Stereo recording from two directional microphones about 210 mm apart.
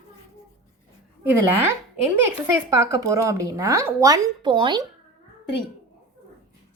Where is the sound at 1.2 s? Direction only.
10° right (ahead or behind).